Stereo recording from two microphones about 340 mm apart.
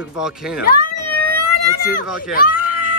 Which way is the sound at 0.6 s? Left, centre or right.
Left.